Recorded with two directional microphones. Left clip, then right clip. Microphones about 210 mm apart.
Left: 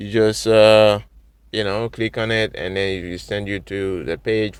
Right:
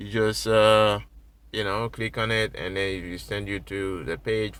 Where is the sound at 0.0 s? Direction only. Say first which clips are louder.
Left 7 dB; 35° left (ahead or behind).